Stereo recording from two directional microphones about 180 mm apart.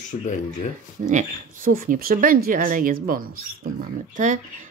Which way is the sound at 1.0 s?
45° right (ahead or behind).